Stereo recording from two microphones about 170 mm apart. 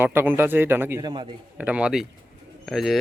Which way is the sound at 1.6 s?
5° right (ahead or behind).